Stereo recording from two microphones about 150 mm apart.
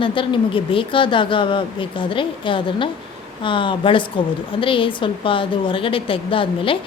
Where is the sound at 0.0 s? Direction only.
35° left (ahead or behind).